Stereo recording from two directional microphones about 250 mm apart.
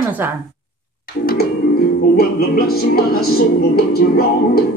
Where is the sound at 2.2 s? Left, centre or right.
Left.